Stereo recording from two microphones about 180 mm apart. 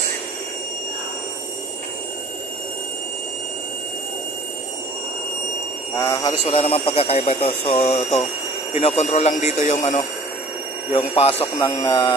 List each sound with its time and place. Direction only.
5.9 s speech: 20° left (ahead or behind)
6.4 s speech: 30° left (ahead or behind)
11.6 s speech: 25° left (ahead or behind)